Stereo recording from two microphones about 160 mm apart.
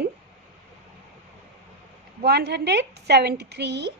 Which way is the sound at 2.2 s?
90° right.